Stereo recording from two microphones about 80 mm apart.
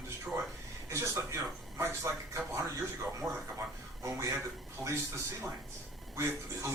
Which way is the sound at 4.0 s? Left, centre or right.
Right.